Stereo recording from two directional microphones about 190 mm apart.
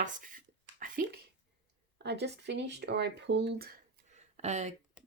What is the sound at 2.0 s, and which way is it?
Speech, 60° right (ahead or behind).